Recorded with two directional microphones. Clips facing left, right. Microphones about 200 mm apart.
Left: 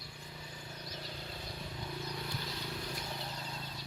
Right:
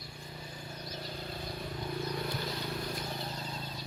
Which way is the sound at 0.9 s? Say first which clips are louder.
Right 5 dB; 45° right (ahead or behind).